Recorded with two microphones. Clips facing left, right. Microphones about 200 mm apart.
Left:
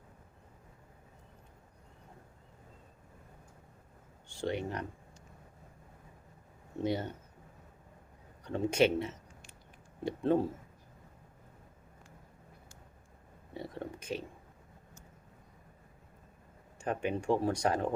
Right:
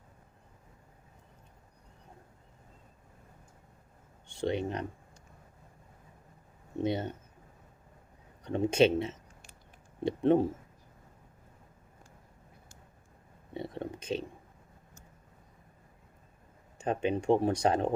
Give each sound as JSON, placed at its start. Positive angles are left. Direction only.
{"t": 4.3, "sound": "speech", "side_deg": -20}
{"t": 6.7, "sound": "speech", "side_deg": -20}
{"t": 8.4, "sound": "speech", "side_deg": -20}
{"t": 13.5, "sound": "a sound", "side_deg": -20}
{"t": 16.7, "sound": "speech", "side_deg": -20}